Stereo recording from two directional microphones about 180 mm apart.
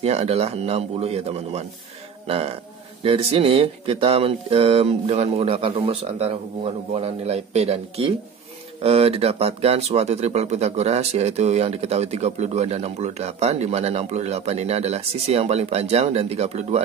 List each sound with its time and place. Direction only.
0.0 s speech: 35° right (ahead or behind)